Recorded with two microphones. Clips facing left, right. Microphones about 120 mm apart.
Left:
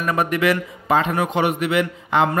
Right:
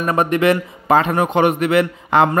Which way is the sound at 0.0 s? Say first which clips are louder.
Right 4 dB; 40° right (ahead or behind).